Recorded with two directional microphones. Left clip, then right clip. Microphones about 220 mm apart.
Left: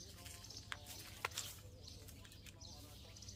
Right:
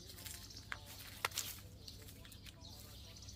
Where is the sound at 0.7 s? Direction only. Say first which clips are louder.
Right 2 dB; 20° left (ahead or behind).